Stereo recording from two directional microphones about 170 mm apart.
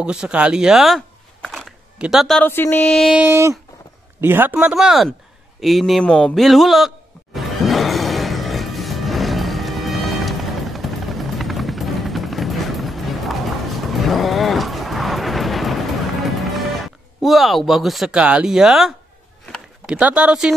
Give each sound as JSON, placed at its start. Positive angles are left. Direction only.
{"t": 0.0, "sound": "speech", "side_deg": -5}
{"t": 3.3, "sound": "speech", "side_deg": -15}
{"t": 7.3, "sound": "music", "side_deg": 0}
{"t": 16.3, "sound": "speech", "side_deg": 0}
{"t": 19.4, "sound": "a sound", "side_deg": 5}
{"t": 20.0, "sound": "speech", "side_deg": -10}